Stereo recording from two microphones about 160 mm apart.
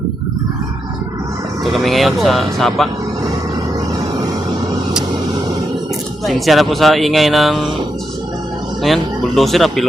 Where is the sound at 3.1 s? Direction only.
25° right (ahead or behind).